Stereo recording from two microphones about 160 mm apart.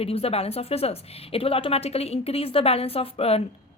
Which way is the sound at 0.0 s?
40° left (ahead or behind).